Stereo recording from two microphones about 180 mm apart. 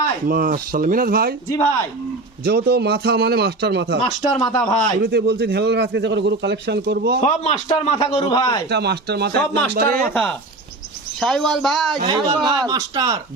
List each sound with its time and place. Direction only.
0.3 s speech: 55° right (ahead or behind)
1.5 s a man's voice: 20° left (ahead or behind)
2.4 s a man's voice: 60° right (ahead or behind)
4.4 s a man's voice: 20° left (ahead or behind)
5.0 s a man's voice: 65° right (ahead or behind)
7.2 s speech: 40° left (ahead or behind)
7.7 s a man's voice: 30° left (ahead or behind)
8.7 s a man's voice: 65° right (ahead or behind)
9.7 s speech: 55° right (ahead or behind)
11.2 s speech: centre (ahead or behind)
12.0 s speech: 25° right (ahead or behind)